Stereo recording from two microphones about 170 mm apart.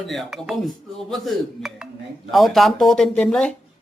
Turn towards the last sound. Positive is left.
turn(degrees=5)  # may be behind; listen again after turning